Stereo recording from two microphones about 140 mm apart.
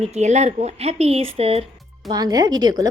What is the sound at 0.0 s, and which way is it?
Speech, 55° right (ahead or behind).